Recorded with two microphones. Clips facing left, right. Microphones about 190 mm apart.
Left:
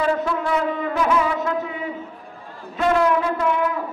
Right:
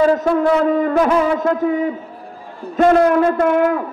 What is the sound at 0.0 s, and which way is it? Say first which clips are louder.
A man's voice: right 8 dB; 40° right (ahead or behind).